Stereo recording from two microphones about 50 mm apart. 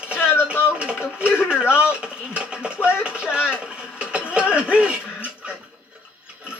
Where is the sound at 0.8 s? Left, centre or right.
Right.